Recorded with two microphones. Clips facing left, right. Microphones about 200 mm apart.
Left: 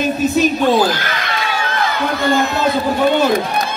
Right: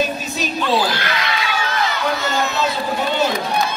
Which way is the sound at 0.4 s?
45° left (ahead or behind).